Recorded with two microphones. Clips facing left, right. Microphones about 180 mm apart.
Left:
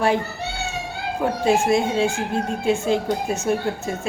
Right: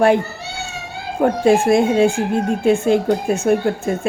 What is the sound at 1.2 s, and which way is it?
A woman's voice, 55° right (ahead or behind).